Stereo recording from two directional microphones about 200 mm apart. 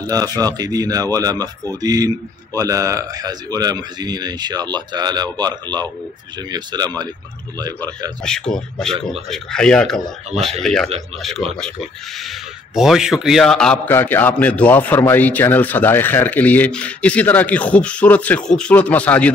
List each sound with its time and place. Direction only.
0.4 s speech: 20° right (ahead or behind)
8.2 s a man's voice: 5° left (ahead or behind)